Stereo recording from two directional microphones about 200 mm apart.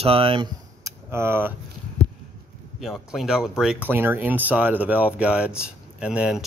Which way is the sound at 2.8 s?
Centre (ahead or behind).